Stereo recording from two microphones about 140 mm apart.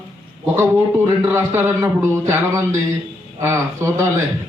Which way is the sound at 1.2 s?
20° right (ahead or behind).